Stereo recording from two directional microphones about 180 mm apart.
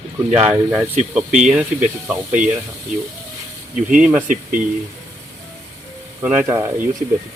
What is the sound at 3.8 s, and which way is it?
Speech, 5° right (ahead or behind).